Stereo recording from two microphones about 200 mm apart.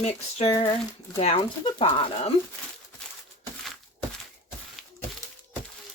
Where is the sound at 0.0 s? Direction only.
30° left (ahead or behind).